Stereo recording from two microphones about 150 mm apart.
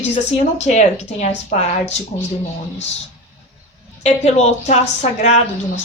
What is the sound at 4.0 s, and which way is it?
A woman's voice, 45° left (ahead or behind).